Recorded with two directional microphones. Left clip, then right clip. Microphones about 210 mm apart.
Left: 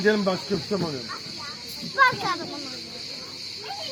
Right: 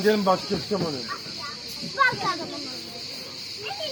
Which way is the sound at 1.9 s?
10° right (ahead or behind).